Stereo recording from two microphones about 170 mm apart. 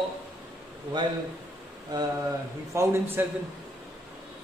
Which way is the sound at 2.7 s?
15° right (ahead or behind).